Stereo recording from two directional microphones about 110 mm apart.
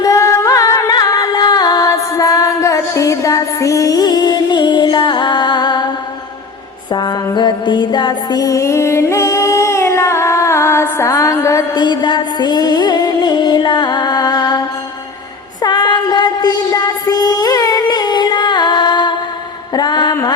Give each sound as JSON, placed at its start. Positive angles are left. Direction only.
{"t": 0.0, "sound": "music", "side_deg": 30}
{"t": 6.9, "sound": "music", "side_deg": 40}
{"t": 15.6, "sound": "child singing", "side_deg": 40}
{"t": 19.7, "sound": "a sound", "side_deg": 40}